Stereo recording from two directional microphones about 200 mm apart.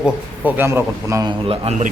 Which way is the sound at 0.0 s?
10° right (ahead or behind).